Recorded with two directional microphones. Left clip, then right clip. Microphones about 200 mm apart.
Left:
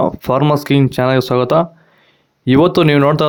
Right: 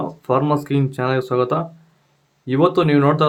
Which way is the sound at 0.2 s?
50° left (ahead or behind).